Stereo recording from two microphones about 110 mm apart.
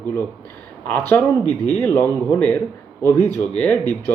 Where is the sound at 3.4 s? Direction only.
10° left (ahead or behind).